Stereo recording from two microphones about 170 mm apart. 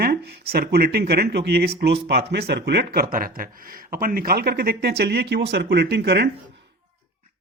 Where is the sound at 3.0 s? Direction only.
55° right (ahead or behind); by 6.3 s 75° right (ahead or behind).